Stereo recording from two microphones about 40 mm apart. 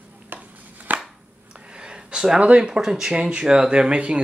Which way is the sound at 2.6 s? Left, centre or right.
Centre.